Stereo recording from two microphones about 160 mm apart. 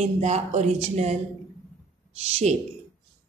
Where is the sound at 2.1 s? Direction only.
40° right (ahead or behind).